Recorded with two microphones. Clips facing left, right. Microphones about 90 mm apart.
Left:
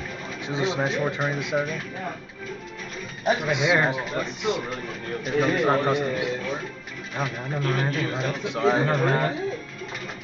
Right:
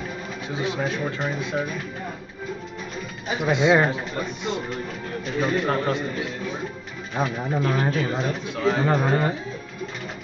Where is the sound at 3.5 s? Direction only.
20° right (ahead or behind).